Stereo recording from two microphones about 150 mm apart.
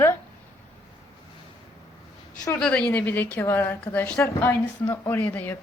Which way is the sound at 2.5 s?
5° left (ahead or behind).